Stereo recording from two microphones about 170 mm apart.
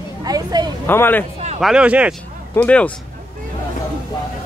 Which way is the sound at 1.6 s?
5° right (ahead or behind).